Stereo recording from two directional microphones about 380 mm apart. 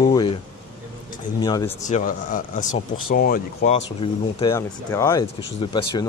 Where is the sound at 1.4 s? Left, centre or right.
Centre.